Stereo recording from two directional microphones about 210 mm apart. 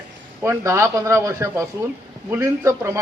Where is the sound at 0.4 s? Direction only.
15° right (ahead or behind).